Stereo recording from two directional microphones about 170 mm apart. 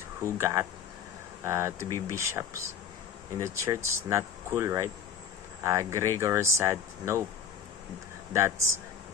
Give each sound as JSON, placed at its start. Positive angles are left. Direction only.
{"t": 0.2, "sound": "speech", "side_deg": -15}
{"t": 8.3, "sound": "speech", "side_deg": -15}